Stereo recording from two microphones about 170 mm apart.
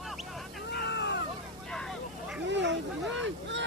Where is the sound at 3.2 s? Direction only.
90° right.